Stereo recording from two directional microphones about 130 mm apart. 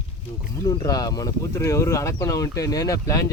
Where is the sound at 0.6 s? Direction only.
30° left (ahead or behind).